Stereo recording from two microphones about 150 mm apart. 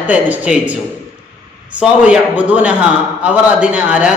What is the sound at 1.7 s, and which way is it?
Speech, 5° right (ahead or behind).